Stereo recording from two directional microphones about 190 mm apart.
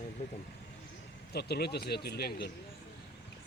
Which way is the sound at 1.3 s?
60° left (ahead or behind).